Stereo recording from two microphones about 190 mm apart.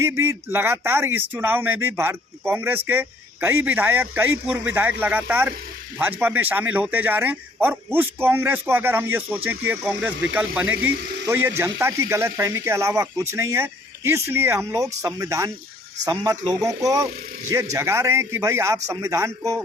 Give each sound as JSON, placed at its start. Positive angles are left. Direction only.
{"t": 0.0, "sound": "speech", "side_deg": -15}